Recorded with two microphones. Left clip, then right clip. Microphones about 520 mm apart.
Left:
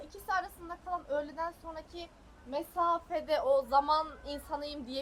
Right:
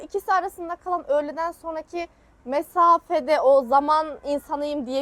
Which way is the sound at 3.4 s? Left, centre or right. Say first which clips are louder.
Right 10 dB; right.